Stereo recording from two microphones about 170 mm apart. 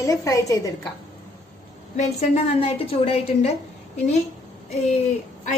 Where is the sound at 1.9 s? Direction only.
40° left (ahead or behind).